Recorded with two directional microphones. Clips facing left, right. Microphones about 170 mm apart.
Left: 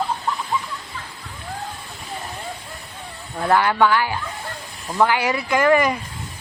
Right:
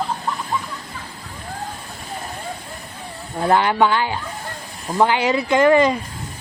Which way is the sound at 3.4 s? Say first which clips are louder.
Right 1 dB; 20° right (ahead or behind).